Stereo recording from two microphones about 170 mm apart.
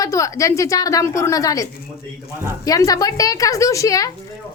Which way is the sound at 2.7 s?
20° left (ahead or behind).